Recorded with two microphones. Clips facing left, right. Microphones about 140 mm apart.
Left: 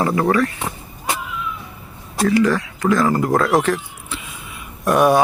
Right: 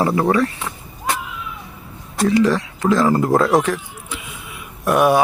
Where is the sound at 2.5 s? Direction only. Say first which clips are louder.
Right 1 dB; 25° right (ahead or behind).